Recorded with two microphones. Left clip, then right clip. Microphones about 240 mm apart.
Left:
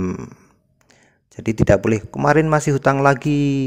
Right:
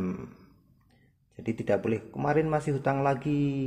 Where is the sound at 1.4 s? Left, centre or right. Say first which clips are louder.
Left 12 dB; left.